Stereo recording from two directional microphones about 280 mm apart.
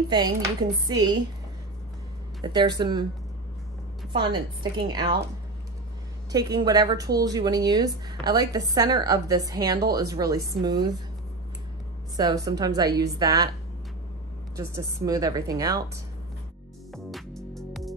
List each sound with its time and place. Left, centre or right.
0.1 s speech: centre
2.4 s speech: centre
4.7 s speech: centre
6.3 s speech: centre
12.2 s speech: centre
14.6 s speech: centre
16.9 s music: centre